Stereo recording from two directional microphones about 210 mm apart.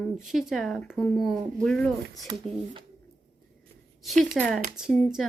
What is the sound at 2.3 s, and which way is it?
Speech, 25° right (ahead or behind).